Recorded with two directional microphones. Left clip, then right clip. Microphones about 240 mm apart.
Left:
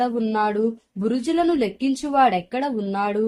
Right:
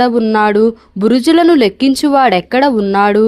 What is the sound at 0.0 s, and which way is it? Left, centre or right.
Speech, right.